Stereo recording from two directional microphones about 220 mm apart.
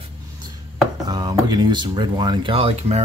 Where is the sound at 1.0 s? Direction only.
20° right (ahead or behind).